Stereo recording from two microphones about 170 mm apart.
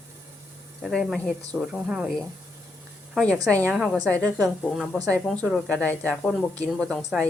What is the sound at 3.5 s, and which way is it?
A woman's voice, 10° left (ahead or behind).